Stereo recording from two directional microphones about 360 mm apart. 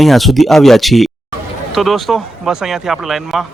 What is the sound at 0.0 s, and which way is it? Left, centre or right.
Speech, centre.